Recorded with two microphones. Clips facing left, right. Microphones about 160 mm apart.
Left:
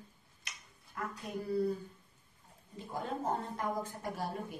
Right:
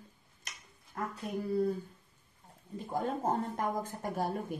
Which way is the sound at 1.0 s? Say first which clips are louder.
Right 3 dB; 40° right (ahead or behind).